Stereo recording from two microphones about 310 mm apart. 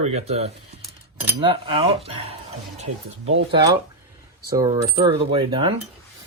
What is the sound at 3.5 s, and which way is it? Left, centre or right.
Coin, centre.